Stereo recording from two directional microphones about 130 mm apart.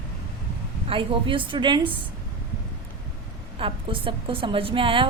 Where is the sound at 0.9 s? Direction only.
40° right (ahead or behind).